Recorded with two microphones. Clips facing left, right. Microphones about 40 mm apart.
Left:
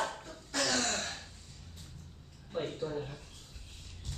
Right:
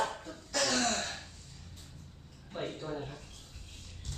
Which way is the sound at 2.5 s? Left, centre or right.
Centre.